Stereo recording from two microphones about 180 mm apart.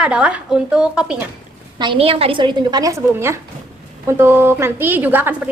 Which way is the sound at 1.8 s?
30° right (ahead or behind).